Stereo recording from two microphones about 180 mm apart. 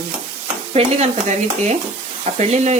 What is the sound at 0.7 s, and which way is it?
Stir, 40° right (ahead or behind).